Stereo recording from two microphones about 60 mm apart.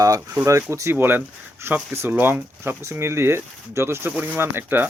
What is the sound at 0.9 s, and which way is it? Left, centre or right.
Speech, right.